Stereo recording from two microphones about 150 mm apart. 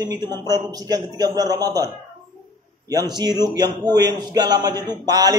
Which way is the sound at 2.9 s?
25° right (ahead or behind).